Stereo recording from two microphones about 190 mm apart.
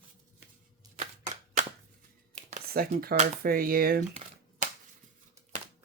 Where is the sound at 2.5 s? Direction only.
45° right (ahead or behind).